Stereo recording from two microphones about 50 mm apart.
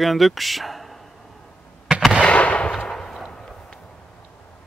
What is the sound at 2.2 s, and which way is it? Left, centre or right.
Fireworks, left.